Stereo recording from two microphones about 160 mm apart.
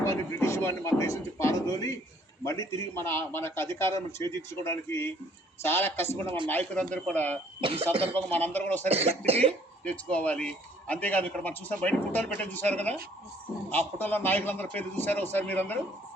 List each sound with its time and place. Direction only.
0.0 s a man's voice: 20° left (ahead or behind)
7.6 s cough: 35° right (ahead or behind)
8.1 s a man's voice: 10° left (ahead or behind)
8.9 s cough: 40° right (ahead or behind)
9.8 s a man's voice: 10° left (ahead or behind)